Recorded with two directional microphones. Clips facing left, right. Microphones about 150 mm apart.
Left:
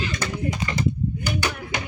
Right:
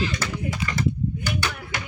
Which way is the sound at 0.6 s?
25° left (ahead or behind).